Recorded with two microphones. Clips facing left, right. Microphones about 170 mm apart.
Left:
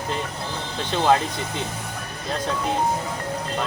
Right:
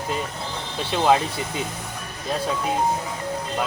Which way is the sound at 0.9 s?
5° right (ahead or behind).